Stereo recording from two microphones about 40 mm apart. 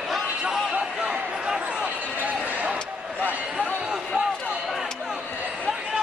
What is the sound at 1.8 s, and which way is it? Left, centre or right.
Basketball bounce, right.